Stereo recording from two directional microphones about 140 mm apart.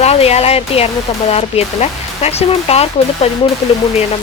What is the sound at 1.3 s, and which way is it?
Speech, 45° left (ahead or behind).